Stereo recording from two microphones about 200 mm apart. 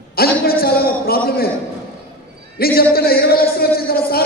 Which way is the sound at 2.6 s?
50° left (ahead or behind).